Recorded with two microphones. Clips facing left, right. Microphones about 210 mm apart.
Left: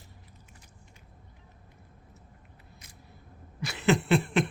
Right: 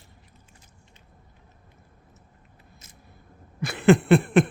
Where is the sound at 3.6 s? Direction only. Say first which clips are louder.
Right 8 dB; 55° right (ahead or behind).